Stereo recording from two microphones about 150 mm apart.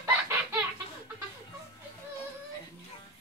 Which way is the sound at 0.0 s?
15° right (ahead or behind).